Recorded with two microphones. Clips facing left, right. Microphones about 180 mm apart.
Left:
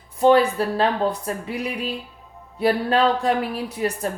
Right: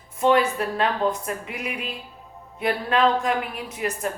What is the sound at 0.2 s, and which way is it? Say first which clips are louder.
A woman's voice: left 4 dB; 35° left (ahead or behind).